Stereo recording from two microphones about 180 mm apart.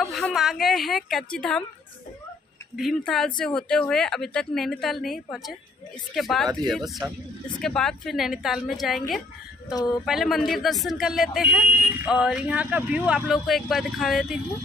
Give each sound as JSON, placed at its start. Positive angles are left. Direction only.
{"t": 0.0, "sound": "a woman's voice", "side_deg": 0}
{"t": 2.7, "sound": "speech", "side_deg": 0}
{"t": 10.0, "sound": "speech", "side_deg": 0}